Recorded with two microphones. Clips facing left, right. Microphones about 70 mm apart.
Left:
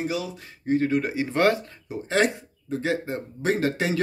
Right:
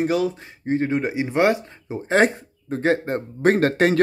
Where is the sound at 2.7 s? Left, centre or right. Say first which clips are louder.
Right 5 dB; right.